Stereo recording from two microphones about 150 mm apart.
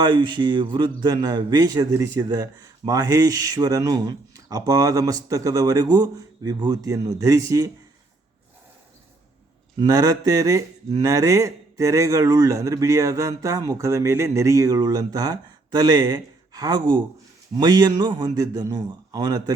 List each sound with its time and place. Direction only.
0.0 s speech: 30° right (ahead or behind)
9.8 s speech: 25° right (ahead or behind)